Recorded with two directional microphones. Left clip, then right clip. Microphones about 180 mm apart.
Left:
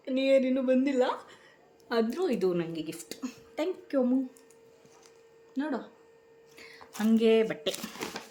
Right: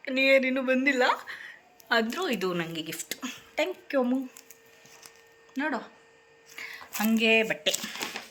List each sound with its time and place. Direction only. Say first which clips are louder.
0.0 s speech: right 3 dB; 5° left (ahead or behind)
6.6 s a sound: right 4 dB; 5° left (ahead or behind)
7.4 s speech: right 4 dB; 5° left (ahead or behind)